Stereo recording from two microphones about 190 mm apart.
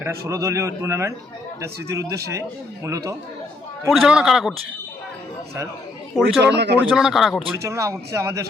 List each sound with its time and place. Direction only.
0.0 s speech: 15° right (ahead or behind)
3.8 s a man's voice: centre (ahead or behind)
6.4 s speech: 60° right (ahead or behind)
6.7 s a man's voice: 5° right (ahead or behind)
7.4 s speech: 20° right (ahead or behind)